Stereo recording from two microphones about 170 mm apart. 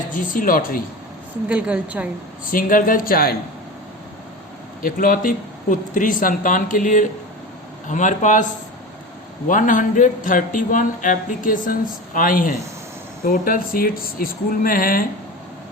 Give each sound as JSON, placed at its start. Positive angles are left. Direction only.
{"t": 0.1, "sound": "speech", "side_deg": 55}
{"t": 1.5, "sound": "a woman's voice", "side_deg": -10}
{"t": 2.5, "sound": "speech", "side_deg": 55}
{"t": 4.8, "sound": "speech", "side_deg": 55}